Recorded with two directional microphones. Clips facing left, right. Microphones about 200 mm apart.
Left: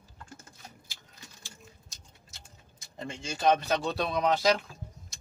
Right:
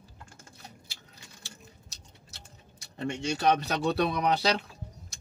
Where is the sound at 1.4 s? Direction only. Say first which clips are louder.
Right 1 dB; 70° right (ahead or behind).